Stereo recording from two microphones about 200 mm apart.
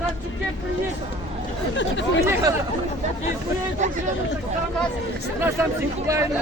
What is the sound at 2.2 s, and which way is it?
Speech, 15° right (ahead or behind).